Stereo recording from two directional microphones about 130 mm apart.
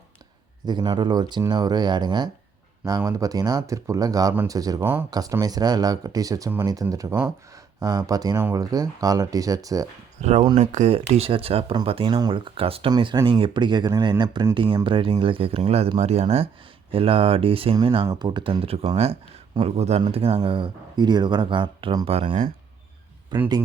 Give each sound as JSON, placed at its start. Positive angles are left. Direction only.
{"t": 0.6, "sound": "speech", "side_deg": -35}
{"t": 4.8, "sound": "speech", "side_deg": -15}
{"t": 5.1, "sound": "speech", "side_deg": -30}
{"t": 10.2, "sound": "speech", "side_deg": -60}
{"t": 18.0, "sound": "speech", "side_deg": -30}
{"t": 23.3, "sound": "speech", "side_deg": -35}